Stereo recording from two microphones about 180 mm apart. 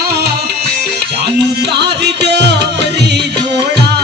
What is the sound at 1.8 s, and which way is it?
Music, 70° right (ahead or behind).